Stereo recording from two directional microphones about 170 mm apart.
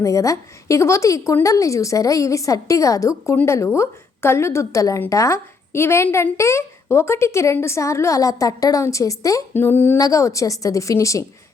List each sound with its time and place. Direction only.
0.0 s a woman's voice: 20° left (ahead or behind)